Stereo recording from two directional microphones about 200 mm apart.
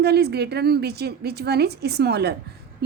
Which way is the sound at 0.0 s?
55° right (ahead or behind).